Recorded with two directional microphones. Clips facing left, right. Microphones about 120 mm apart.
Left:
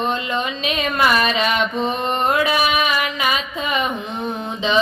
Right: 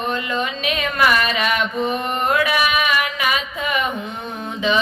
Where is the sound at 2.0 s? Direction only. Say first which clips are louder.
Left 1 dB; 25° left (ahead or behind).